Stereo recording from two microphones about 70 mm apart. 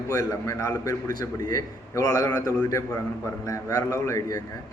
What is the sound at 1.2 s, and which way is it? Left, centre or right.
Speech, left.